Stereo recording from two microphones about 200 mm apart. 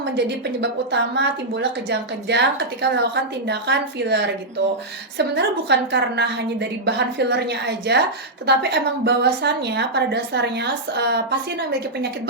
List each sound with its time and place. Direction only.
0.0 s a woman's voice: 60° right (ahead or behind)